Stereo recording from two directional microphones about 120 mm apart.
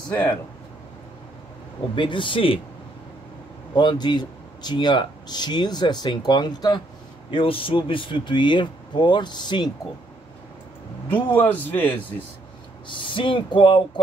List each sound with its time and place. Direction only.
2.0 s speech: 40° left (ahead or behind)
3.7 s speech: 40° left (ahead or behind)
7.2 s speech: 45° left (ahead or behind)
11.3 s speech: 15° left (ahead or behind)
12.8 s speech: 40° left (ahead or behind)